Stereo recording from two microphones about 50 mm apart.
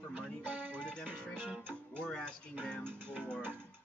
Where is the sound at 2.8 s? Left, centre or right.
Right.